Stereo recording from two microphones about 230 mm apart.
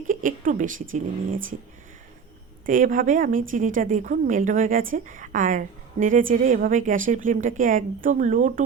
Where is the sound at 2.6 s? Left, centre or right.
Right.